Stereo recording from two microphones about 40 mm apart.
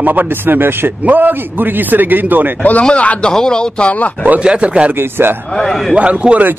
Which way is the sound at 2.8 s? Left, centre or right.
Left.